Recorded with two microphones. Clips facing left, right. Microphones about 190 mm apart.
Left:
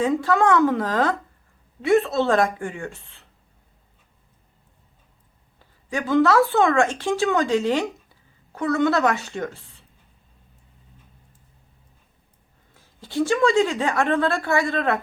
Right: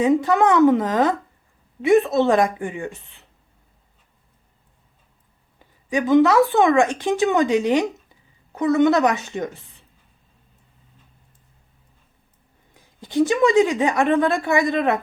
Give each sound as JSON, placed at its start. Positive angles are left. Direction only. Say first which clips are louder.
{"t": 0.0, "sound": "a woman's voice", "louder": "right 3 dB", "side_deg": -20}
{"t": 5.5, "sound": "speech", "louder": "right 5 dB", "side_deg": -15}
{"t": 12.7, "sound": "a woman's voice", "louder": "right 4 dB", "side_deg": -15}